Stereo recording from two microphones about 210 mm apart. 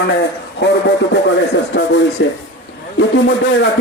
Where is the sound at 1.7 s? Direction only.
55° left (ahead or behind).